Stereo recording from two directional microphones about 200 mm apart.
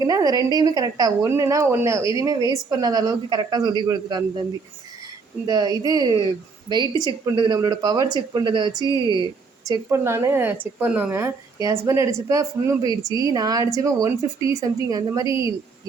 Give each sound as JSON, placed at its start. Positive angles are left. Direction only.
{"t": 0.0, "sound": "a woman's voice", "side_deg": -20}
{"t": 5.5, "sound": "a woman's voice", "side_deg": -20}